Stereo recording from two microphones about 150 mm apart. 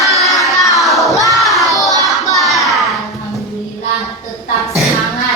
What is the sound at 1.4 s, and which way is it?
Child singing, centre (ahead or behind).